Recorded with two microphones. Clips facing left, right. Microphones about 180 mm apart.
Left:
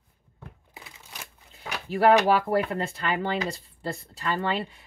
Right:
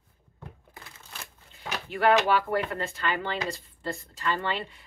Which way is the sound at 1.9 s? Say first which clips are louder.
Left 3 dB; 35° left (ahead or behind).